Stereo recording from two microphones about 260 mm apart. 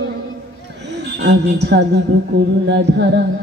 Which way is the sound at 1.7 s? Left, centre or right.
Right.